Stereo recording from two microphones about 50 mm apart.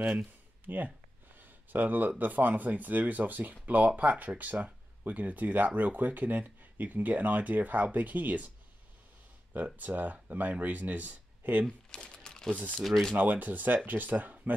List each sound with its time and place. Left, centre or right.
0.0 s speech: centre
0.7 s speech: right
9.8 s speech: right
11.9 s crumpling: centre
13.1 s speech: right